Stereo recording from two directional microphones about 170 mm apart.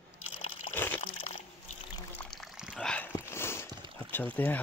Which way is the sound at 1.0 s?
40° left (ahead or behind).